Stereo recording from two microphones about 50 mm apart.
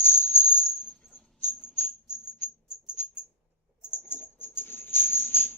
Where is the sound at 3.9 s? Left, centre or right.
Left.